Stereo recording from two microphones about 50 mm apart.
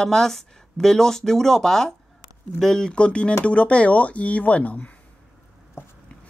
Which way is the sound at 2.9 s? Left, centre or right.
Left.